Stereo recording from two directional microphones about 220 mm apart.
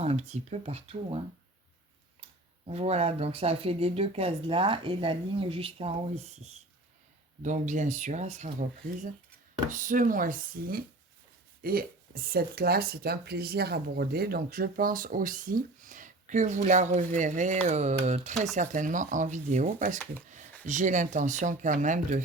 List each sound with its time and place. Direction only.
0.0 s speech: 30° right (ahead or behind)
2.6 s speech: 30° right (ahead or behind)